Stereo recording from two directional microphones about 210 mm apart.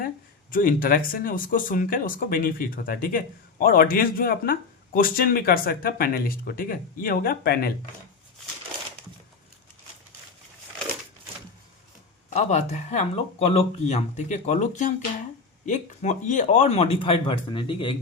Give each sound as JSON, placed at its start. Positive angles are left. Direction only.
{"t": 0.5, "sound": "speech", "side_deg": 40}
{"t": 12.3, "sound": "speech", "side_deg": 35}